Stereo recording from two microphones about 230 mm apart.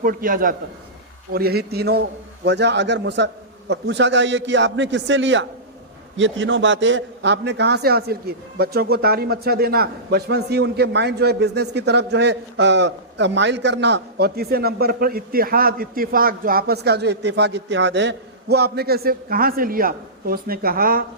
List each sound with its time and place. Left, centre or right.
0.0 s a man's voice: right